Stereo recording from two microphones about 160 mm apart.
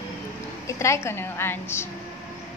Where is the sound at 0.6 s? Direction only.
20° left (ahead or behind).